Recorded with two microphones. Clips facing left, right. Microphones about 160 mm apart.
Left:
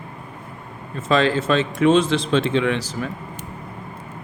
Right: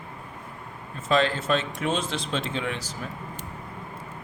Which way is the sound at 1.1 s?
90° left.